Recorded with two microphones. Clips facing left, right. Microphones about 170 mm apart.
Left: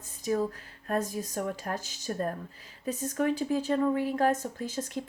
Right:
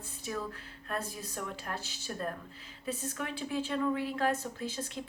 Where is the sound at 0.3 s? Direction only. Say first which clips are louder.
Left 9 dB; 40° left (ahead or behind).